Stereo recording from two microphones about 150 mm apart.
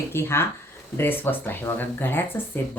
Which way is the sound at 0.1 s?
15° left (ahead or behind).